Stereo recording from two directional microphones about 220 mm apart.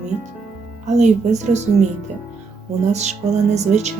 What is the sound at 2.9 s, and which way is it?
Speech, 30° right (ahead or behind).